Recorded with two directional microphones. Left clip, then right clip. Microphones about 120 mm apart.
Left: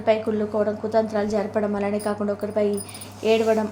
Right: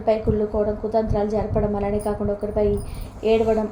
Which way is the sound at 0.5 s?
35° left (ahead or behind).